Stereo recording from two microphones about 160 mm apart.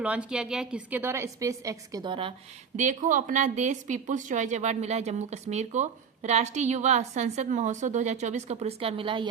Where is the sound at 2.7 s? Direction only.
50° right (ahead or behind).